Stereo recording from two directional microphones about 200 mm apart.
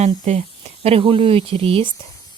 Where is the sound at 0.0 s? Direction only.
30° right (ahead or behind).